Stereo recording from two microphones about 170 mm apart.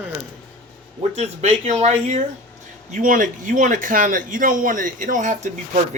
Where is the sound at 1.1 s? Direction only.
40° right (ahead or behind).